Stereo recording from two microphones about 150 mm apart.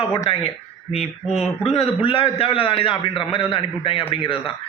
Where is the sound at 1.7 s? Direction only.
40° left (ahead or behind).